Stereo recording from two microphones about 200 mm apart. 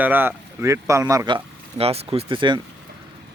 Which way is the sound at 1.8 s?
30° right (ahead or behind).